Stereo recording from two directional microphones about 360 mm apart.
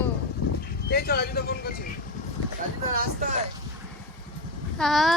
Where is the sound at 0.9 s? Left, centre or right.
Left.